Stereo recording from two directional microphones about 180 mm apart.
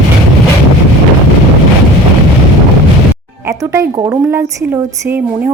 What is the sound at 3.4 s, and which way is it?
Speech, 15° right (ahead or behind).